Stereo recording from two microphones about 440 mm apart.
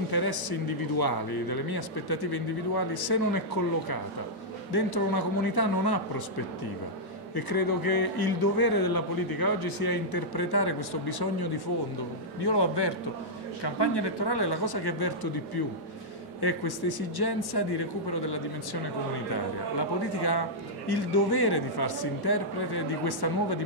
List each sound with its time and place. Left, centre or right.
0.1 s a man's voice: left
4.7 s a man's voice: left
7.3 s a man's voice: left
12.4 s a man's voice: left
20.2 s a man's voice: left